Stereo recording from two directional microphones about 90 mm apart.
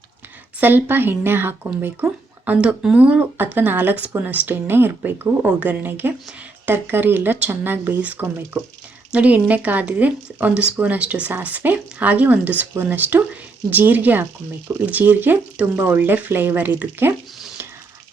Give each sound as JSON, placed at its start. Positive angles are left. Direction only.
{"t": 0.6, "sound": "speech", "side_deg": -20}